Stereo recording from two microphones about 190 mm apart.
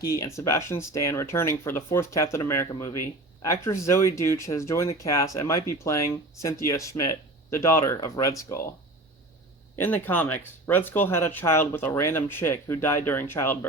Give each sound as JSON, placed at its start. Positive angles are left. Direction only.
{"t": 0.0, "sound": "speech", "side_deg": 20}
{"t": 9.7, "sound": "speech", "side_deg": 10}